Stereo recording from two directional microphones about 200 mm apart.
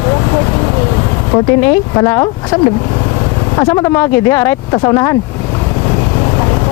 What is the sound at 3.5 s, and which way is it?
Speech, 20° left (ahead or behind).